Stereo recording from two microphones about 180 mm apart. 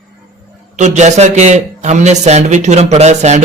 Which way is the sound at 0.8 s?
40° right (ahead or behind).